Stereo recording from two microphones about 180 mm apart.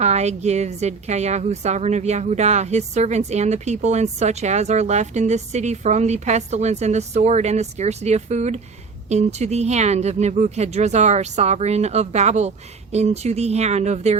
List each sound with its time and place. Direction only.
0.0 s a woman's voice: 40° right (ahead or behind)